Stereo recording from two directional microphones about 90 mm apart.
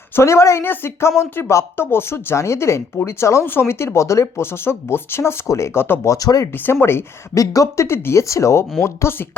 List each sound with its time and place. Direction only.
0.2 s speech: 30° left (ahead or behind)
6.1 s speech: 40° left (ahead or behind)
6.5 s speech: 25° left (ahead or behind)